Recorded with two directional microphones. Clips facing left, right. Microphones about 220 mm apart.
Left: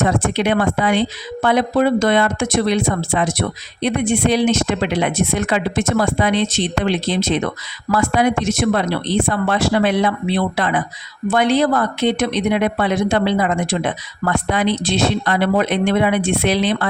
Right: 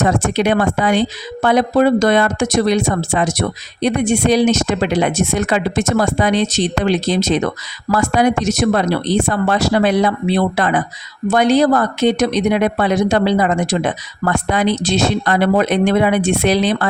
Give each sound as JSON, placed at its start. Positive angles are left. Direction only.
{"t": 0.0, "sound": "speech", "side_deg": -45}